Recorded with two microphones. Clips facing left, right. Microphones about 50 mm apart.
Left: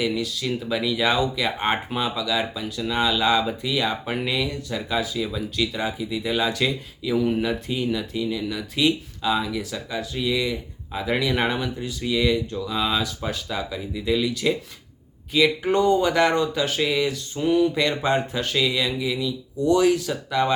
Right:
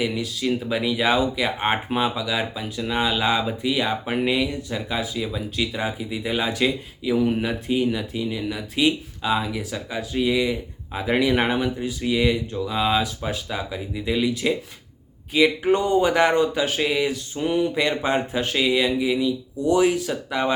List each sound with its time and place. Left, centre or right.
0.0 s speech: centre